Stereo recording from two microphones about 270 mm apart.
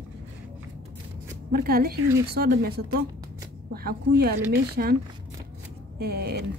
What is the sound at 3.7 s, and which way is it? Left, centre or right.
Speech, right.